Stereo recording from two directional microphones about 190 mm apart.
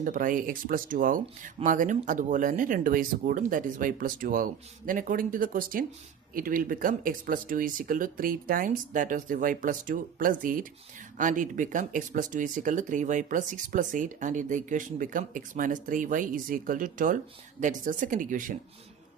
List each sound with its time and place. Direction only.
0.0 s speech: 45° right (ahead or behind)